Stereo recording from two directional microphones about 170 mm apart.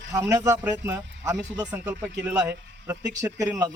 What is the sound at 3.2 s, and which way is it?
Speech, 20° right (ahead or behind).